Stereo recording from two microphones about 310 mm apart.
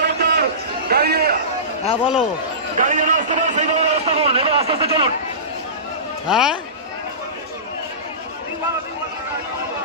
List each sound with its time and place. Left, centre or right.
0.0 s a sound: right
0.8 s a man's voice: right
2.8 s a man's voice: right
6.2 s speech: centre